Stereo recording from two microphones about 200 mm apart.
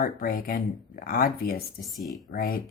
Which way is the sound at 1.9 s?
15° left (ahead or behind).